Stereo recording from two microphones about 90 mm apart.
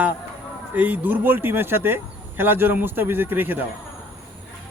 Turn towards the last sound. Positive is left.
turn(degrees=-20)  # may be behind; listen again after turning